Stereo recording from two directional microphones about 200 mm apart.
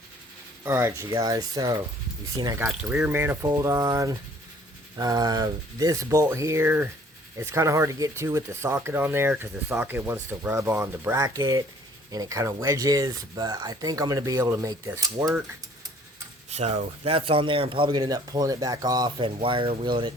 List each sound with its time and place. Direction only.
0.6 s speech: 15° right (ahead or behind)
2.6 s speech: 5° right (ahead or behind)
16.5 s speech: 35° right (ahead or behind)